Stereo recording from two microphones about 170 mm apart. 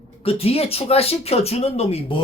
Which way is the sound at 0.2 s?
35° left (ahead or behind).